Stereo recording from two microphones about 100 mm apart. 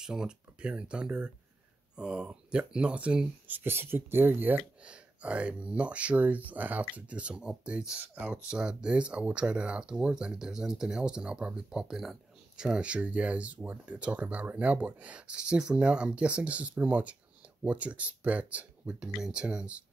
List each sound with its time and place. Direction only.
0.0 s speech: 5° right (ahead or behind)